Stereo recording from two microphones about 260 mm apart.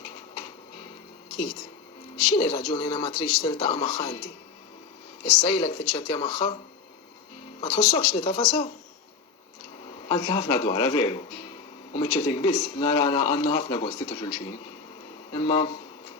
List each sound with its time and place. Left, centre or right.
2.4 s speech: centre
5.5 s speech: centre
7.6 s speech: centre
10.1 s speech: centre